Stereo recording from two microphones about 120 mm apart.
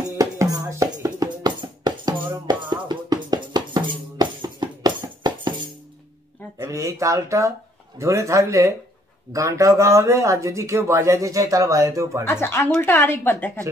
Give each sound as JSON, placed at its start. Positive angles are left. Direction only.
{"t": 0.2, "sound": "music", "side_deg": -25}
{"t": 6.6, "sound": "a sound", "side_deg": -25}
{"t": 8.0, "sound": "speech", "side_deg": -25}
{"t": 12.3, "sound": "a woman's voice", "side_deg": 20}